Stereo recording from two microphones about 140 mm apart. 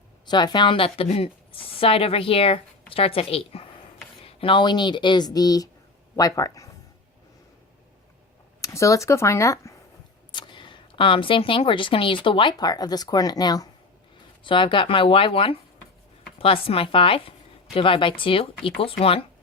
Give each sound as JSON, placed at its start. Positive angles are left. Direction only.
{"t": 0.3, "sound": "a woman's voice", "side_deg": 30}
{"t": 8.6, "sound": "speech", "side_deg": 20}
{"t": 10.3, "sound": "speech", "side_deg": 35}